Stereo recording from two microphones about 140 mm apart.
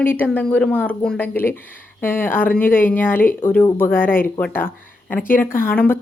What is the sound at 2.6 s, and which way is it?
Speech, 80° left.